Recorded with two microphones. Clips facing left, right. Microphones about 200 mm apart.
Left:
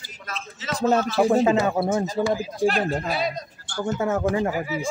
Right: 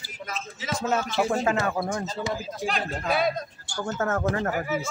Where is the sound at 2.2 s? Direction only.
30° left (ahead or behind).